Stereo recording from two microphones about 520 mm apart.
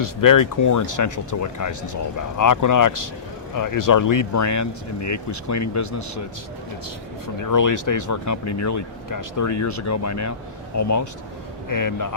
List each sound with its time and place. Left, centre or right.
0.0 s speech: left
7.4 s speech: left